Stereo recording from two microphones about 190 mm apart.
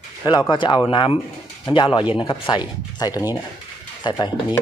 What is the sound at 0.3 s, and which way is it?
Speech, 20° left (ahead or behind).